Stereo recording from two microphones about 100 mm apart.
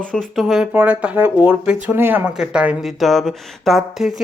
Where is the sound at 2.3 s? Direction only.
5° right (ahead or behind).